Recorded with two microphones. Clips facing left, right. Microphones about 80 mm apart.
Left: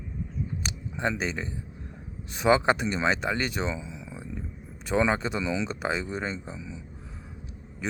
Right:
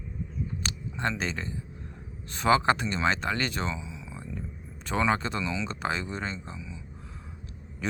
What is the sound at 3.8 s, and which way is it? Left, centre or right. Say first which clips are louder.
Speech: left 2 dB; left.